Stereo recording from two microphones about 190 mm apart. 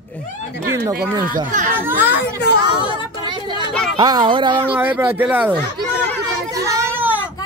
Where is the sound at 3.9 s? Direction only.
20° right (ahead or behind).